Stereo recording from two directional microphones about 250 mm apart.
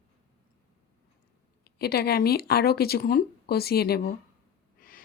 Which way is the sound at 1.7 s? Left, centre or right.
Left.